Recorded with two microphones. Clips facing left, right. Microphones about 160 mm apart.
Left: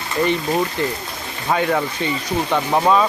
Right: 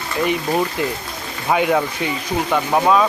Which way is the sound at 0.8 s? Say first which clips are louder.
Even; 10° right (ahead or behind).